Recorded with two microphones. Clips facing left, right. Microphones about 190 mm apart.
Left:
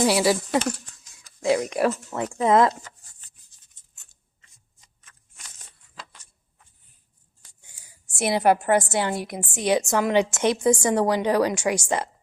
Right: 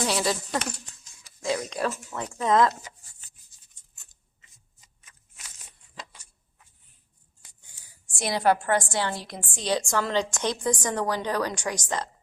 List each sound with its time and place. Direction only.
0.0 s a woman's voice: 10° left (ahead or behind)
1.7 s a woman's voice: 30° left (ahead or behind)
6.1 s a sound: 5° right (ahead or behind)
8.1 s a woman's voice: 20° left (ahead or behind)